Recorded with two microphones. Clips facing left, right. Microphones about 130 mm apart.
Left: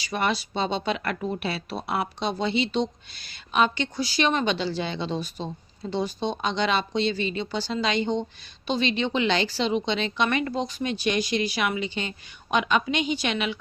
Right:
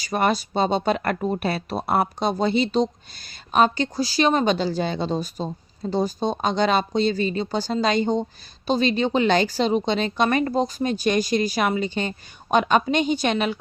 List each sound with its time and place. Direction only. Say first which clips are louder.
0.0 s speech: right 5 dB; 45° right (ahead or behind)